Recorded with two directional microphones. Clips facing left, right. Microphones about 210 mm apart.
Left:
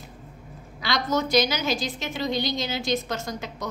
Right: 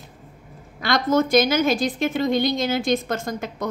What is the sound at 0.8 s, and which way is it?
A woman's voice, 50° right (ahead or behind).